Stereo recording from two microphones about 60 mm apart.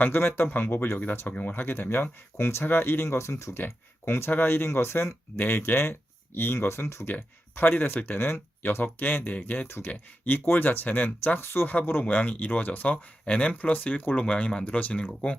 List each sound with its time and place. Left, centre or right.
0.0 s speech: left
1.3 s speech: left
3.6 s speech: left
7.1 s speech: left
9.3 s speech: left
9.6 s speech: left
11.3 s speech: left; by 15.4 s centre